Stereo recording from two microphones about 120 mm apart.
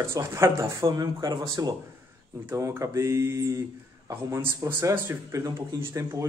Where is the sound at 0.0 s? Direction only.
20° right (ahead or behind).